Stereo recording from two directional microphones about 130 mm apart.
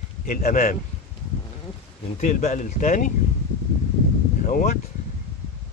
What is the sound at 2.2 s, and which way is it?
Speech, 75° left (ahead or behind).